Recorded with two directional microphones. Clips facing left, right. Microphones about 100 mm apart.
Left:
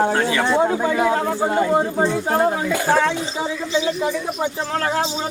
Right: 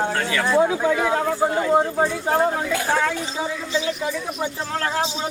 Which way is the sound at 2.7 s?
25° left (ahead or behind).